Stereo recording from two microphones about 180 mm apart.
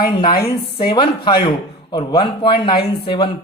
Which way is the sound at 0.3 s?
55° left (ahead or behind).